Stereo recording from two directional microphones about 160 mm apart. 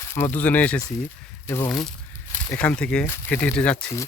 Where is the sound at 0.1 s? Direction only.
15° left (ahead or behind).